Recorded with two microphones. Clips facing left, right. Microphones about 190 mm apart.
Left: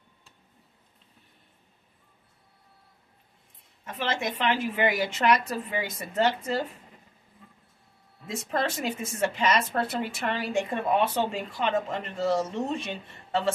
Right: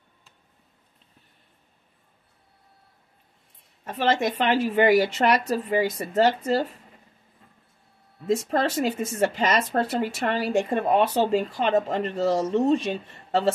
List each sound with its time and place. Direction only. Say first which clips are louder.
3.8 s speech: right 7 dB; 40° right (ahead or behind)
8.3 s speech: right 6 dB; 40° right (ahead or behind)